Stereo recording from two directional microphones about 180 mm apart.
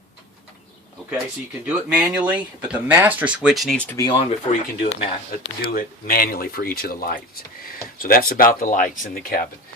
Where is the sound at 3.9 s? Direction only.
20° left (ahead or behind).